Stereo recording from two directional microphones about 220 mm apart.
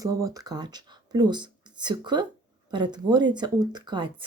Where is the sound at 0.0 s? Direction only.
15° right (ahead or behind).